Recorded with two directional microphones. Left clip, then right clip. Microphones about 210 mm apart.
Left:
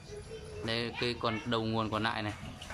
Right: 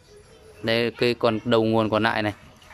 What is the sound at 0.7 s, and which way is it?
Speech, 40° right (ahead or behind).